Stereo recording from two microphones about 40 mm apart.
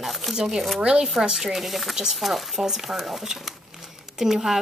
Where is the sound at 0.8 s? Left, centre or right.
Right.